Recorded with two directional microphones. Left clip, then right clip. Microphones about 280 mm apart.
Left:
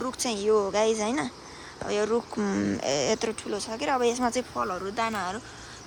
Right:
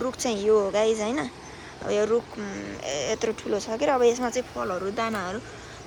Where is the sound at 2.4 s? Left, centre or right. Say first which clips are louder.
Left 5 dB; left.